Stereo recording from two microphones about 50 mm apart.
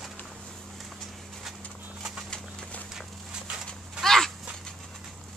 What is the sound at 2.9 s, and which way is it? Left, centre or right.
Walk, centre.